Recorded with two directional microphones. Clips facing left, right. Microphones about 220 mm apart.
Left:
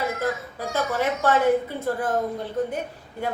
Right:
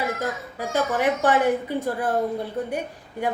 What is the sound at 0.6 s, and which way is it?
A woman's voice, 15° right (ahead or behind).